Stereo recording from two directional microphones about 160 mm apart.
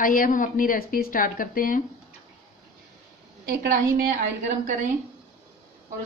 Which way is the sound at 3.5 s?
65° right (ahead or behind).